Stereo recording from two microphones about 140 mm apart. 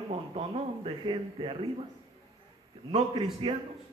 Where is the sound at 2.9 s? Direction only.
45° right (ahead or behind).